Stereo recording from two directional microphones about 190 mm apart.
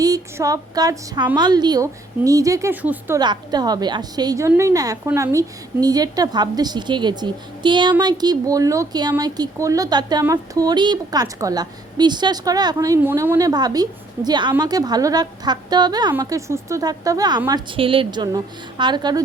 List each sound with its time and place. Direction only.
0.0 s a woman's voice: 20° right (ahead or behind)
3.2 s a woman's voice: 20° right (ahead or behind)